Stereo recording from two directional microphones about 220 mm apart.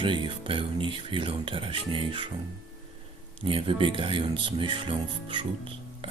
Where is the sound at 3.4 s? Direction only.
25° right (ahead or behind).